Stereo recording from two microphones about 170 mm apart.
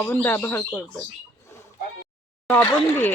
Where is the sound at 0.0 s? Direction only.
15° left (ahead or behind).